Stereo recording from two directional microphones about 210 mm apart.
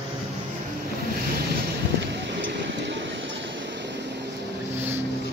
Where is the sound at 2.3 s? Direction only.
60° right (ahead or behind).